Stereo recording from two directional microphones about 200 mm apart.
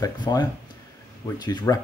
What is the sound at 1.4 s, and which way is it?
Speech, 20° left (ahead or behind).